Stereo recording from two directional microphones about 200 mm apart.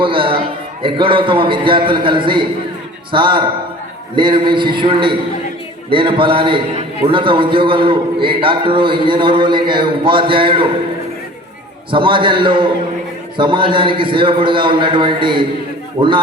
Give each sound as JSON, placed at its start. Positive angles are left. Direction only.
{"t": 0.0, "sound": "a man's voice", "side_deg": -25}
{"t": 11.9, "sound": "a man's voice", "side_deg": -25}